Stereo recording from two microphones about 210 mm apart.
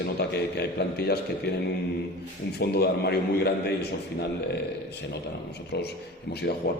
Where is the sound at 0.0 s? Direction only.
50° left (ahead or behind).